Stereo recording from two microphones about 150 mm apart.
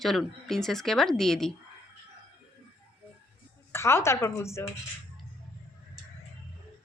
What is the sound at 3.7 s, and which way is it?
Speech, 15° left (ahead or behind).